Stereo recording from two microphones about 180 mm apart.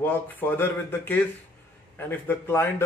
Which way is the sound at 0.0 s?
10° left (ahead or behind).